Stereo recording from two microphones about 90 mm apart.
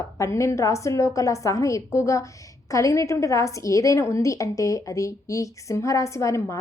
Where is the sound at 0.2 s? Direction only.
35° left (ahead or behind).